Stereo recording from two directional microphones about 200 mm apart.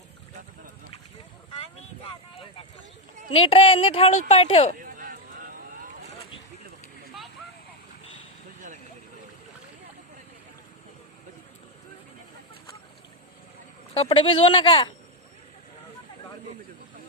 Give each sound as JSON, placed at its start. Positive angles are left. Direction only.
{"t": 3.2, "sound": "speech", "side_deg": 25}
{"t": 4.8, "sound": "boat", "side_deg": -45}
{"t": 13.9, "sound": "speech", "side_deg": 30}